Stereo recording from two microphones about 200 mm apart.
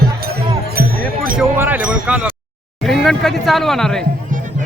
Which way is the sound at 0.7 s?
45° right (ahead or behind).